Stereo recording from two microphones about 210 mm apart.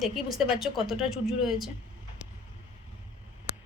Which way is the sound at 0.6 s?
Centre (ahead or behind).